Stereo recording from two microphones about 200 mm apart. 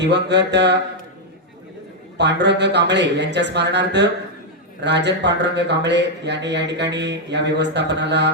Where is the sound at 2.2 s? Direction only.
60° right (ahead or behind).